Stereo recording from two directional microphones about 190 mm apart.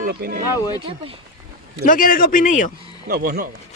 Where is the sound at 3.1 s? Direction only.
55° right (ahead or behind).